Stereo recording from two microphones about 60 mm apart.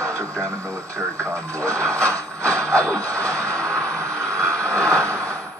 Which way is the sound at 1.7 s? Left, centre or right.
Centre.